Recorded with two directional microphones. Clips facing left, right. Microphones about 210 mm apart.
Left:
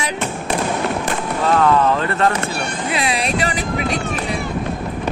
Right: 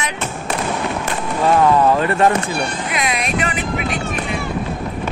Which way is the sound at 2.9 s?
30° left (ahead or behind).